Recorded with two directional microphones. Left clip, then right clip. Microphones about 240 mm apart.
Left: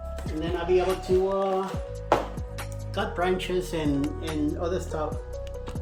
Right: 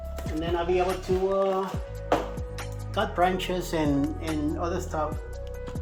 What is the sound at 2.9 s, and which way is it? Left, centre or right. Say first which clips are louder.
Speech: right 2 dB; centre.